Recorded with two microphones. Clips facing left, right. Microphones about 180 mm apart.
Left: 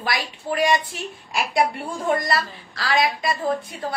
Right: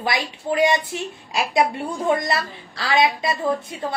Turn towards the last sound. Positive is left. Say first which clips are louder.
# right 1 dB
turn(degrees=-25)  # may be behind; listen again after turning